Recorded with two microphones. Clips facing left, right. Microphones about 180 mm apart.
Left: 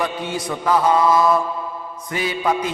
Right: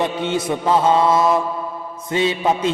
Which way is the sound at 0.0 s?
25° right (ahead or behind).